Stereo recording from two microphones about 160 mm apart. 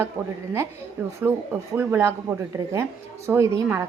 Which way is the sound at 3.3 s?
15° right (ahead or behind).